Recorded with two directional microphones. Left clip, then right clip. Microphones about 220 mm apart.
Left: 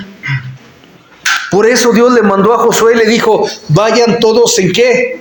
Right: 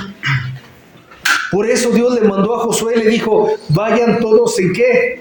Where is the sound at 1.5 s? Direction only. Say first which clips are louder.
Left 6 dB; 30° left (ahead or behind).